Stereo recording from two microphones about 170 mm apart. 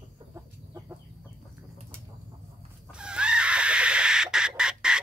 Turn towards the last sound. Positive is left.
turn(degrees=-5)  # may be behind; listen again after turning